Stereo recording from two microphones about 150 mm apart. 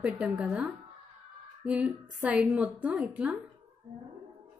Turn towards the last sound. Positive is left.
turn(degrees=-10)  # may be behind; listen again after turning